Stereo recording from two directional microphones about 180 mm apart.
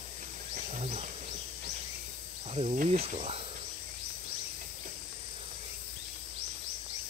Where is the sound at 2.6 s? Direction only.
40° right (ahead or behind).